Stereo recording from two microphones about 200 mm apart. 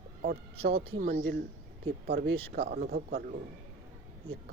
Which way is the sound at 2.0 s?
55° right (ahead or behind).